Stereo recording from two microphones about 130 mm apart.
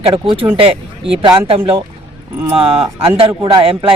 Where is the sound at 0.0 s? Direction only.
45° right (ahead or behind).